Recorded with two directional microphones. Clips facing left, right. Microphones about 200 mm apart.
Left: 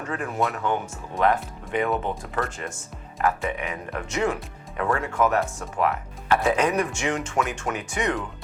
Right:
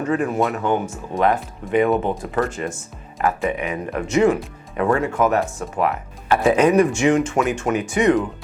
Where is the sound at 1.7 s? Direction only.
10° right (ahead or behind).